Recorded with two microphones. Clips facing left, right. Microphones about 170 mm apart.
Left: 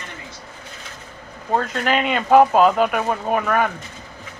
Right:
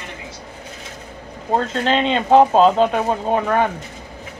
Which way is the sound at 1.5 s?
25° right (ahead or behind).